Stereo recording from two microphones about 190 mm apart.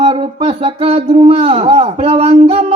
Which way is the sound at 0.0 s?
30° right (ahead or behind).